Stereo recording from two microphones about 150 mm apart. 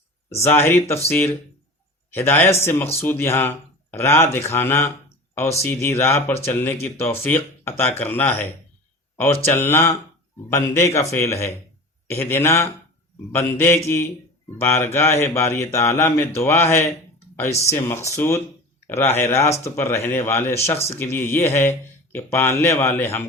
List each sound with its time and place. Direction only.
0.4 s speech: 15° left (ahead or behind)
2.1 s speech: 15° left (ahead or behind)